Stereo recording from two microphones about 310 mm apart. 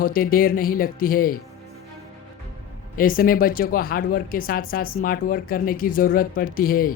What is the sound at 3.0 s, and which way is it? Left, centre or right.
Speech, left.